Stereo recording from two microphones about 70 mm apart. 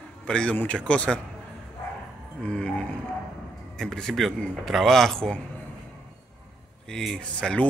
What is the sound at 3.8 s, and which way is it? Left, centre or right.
A man's voice, centre.